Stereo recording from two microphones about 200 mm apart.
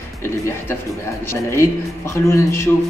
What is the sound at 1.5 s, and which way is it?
Speech, 15° left (ahead or behind).